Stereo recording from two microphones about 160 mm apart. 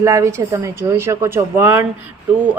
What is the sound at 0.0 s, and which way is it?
A woman's voice, 20° right (ahead or behind).